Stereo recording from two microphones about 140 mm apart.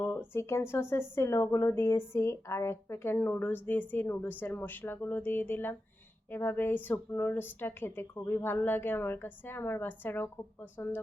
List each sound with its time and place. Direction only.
0.0 s speech: 15° left (ahead or behind)